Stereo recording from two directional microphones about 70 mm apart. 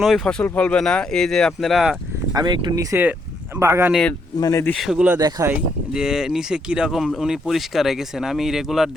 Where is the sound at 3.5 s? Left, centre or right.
Right.